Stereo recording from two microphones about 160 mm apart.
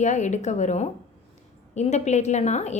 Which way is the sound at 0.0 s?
50° left (ahead or behind).